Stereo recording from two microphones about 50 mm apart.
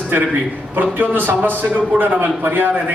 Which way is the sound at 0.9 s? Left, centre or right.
Right.